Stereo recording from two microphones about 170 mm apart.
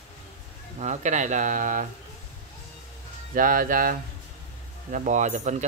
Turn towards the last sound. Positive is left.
turn(degrees=-45)  # may be behind; listen again after turning